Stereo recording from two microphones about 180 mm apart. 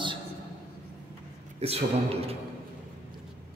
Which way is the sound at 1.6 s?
35° right (ahead or behind).